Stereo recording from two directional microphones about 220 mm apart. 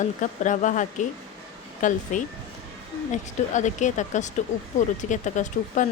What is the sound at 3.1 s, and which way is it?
A woman's voice, 35° left (ahead or behind).